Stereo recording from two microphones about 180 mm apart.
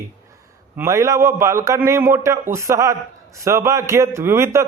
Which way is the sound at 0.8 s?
15° right (ahead or behind).